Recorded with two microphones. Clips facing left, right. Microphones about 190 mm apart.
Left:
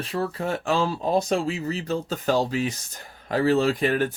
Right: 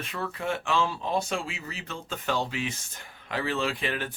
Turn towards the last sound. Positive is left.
turn(degrees=45)  # may be behind; listen again after turning